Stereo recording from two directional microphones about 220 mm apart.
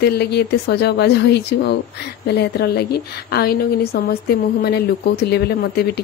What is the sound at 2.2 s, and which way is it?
A woman's voice, 50° left (ahead or behind).